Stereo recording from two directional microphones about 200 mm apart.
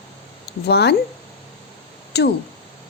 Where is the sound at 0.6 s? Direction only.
55° left (ahead or behind).